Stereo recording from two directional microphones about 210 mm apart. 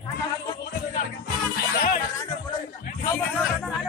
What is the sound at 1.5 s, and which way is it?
Music, 45° left (ahead or behind).